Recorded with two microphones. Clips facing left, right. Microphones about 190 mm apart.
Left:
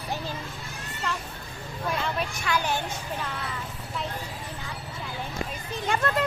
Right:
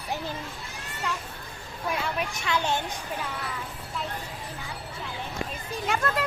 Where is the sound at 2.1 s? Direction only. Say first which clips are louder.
Even; 20° right (ahead or behind).